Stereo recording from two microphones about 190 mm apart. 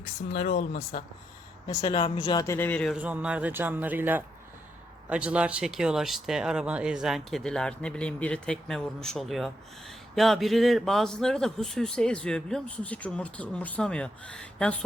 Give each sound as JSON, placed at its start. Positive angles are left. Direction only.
{"t": 0.3, "sound": "speech", "side_deg": 40}
{"t": 1.6, "sound": "speech", "side_deg": 25}
{"t": 3.0, "sound": "a man's voice", "side_deg": -5}